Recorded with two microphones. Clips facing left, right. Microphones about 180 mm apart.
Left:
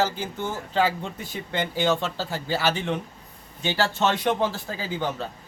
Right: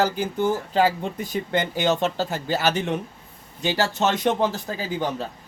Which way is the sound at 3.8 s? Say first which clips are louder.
Even; 20° right (ahead or behind).